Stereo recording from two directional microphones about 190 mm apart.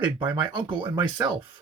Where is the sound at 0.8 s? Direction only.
10° right (ahead or behind).